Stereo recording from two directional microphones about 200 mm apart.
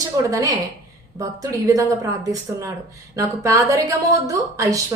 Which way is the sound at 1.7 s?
15° right (ahead or behind).